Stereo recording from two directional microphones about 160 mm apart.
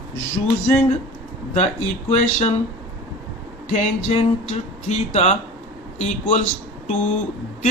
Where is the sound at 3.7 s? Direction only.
40° left (ahead or behind).